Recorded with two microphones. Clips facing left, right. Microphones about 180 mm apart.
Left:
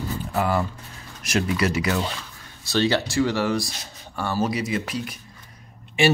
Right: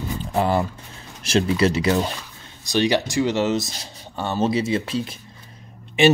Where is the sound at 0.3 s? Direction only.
25° right (ahead or behind).